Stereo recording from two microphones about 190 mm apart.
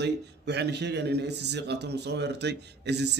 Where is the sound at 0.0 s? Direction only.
60° right (ahead or behind).